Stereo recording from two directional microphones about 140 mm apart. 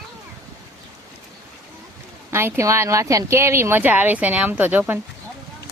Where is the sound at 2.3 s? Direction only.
20° right (ahead or behind).